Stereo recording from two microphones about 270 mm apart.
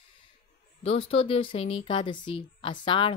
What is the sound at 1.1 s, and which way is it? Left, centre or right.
Speech, centre.